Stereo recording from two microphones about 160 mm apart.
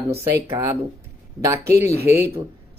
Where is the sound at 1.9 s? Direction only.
80° right.